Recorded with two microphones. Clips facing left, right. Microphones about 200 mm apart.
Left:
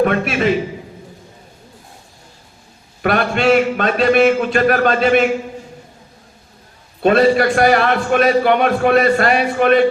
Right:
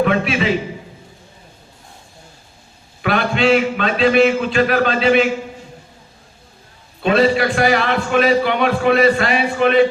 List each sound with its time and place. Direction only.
0.0 s a man's voice: 50° left (ahead or behind)
3.0 s a man's voice: 50° left (ahead or behind)
7.0 s a man's voice: 50° left (ahead or behind)